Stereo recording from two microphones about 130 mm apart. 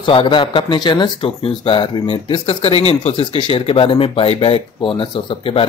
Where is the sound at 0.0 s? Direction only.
40° left (ahead or behind).